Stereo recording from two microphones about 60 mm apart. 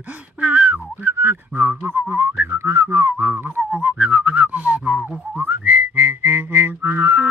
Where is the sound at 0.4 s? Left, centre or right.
Right.